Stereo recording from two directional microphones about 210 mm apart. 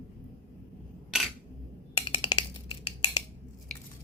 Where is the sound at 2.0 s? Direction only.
20° left (ahead or behind).